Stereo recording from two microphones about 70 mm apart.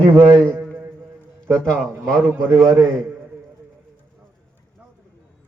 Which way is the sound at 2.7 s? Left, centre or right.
Right.